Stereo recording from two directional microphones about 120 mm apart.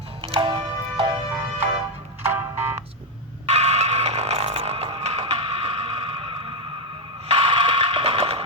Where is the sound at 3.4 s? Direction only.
60° right (ahead or behind).